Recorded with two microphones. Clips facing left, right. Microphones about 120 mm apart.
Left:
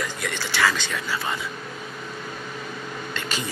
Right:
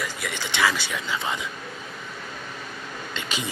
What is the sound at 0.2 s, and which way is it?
Speech, 15° right (ahead or behind).